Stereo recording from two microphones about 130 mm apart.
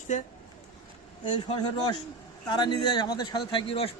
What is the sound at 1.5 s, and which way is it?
Speech, 35° left (ahead or behind).